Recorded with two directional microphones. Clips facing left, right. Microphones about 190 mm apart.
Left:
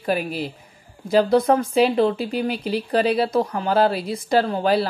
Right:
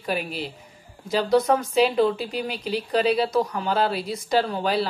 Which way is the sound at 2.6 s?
50° left (ahead or behind).